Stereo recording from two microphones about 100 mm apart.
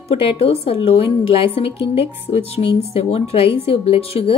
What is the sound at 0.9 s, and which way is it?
Speech, 70° left (ahead or behind).